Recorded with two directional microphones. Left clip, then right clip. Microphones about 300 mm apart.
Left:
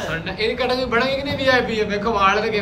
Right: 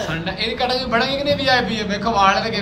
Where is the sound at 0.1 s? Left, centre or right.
Centre.